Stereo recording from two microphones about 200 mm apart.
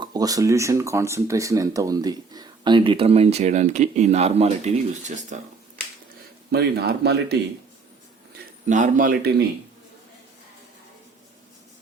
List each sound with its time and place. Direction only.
0.0 s speech: 20° right (ahead or behind); by 5.8 s 35° right (ahead or behind)
6.5 s a man's voice: 55° right (ahead or behind)
8.6 s speech: 40° right (ahead or behind)